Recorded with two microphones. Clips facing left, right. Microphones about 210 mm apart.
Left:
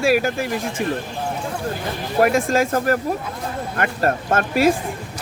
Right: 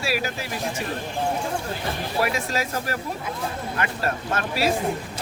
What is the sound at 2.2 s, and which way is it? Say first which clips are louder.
Speech: left 10 dB; 50° left (ahead or behind).